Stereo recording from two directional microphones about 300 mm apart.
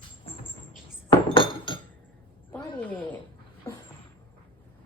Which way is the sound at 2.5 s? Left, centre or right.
Centre.